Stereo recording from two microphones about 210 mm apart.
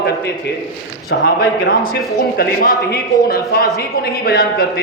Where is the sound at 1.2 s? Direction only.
45° left (ahead or behind).